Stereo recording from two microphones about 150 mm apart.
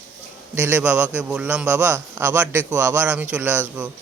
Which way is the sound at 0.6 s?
10° right (ahead or behind).